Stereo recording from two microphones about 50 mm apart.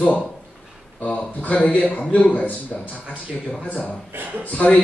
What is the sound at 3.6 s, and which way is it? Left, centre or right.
Speech, left.